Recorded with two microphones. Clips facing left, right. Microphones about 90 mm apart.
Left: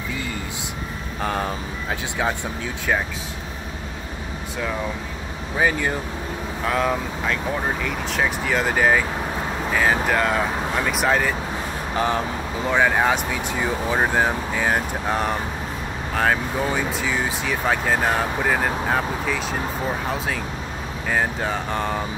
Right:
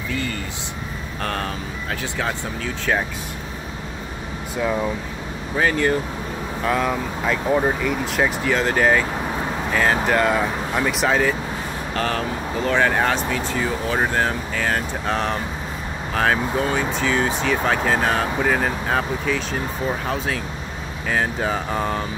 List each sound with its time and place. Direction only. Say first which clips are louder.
1.2 s speech: left 2 dB; 15° left (ahead or behind)
5.6 s speech: right 2 dB; 10° left (ahead or behind)
6.6 s speech: right 1 dB; centre (ahead or behind)
11.9 s speech: left 1 dB; 15° left (ahead or behind)
21.1 s speech: right 1 dB; centre (ahead or behind)